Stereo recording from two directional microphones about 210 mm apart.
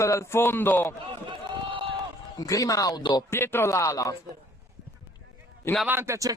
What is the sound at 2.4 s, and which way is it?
A man's voice, 15° left (ahead or behind).